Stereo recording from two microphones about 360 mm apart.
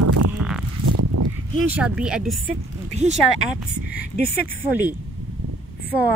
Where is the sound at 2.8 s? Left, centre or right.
Centre.